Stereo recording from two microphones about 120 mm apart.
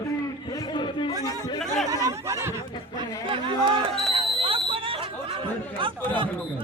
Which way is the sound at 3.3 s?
45° right (ahead or behind).